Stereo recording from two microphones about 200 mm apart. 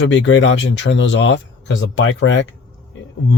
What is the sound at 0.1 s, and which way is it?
Speech, 70° left (ahead or behind).